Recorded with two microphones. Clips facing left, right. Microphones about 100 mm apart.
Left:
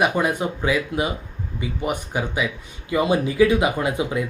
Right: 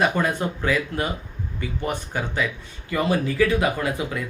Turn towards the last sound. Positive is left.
turn(degrees=20)  # may be behind; listen again after turning